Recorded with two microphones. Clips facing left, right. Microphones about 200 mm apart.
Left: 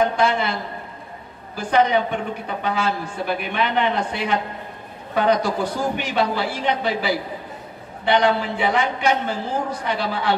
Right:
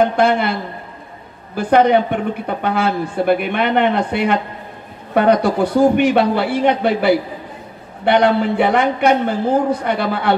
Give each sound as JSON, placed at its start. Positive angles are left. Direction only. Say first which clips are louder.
{"t": 0.1, "sound": "speech", "louder": "right 5 dB", "side_deg": -60}